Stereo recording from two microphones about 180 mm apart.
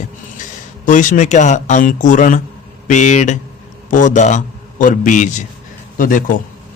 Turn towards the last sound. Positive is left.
turn(degrees=50)  # may be behind; listen again after turning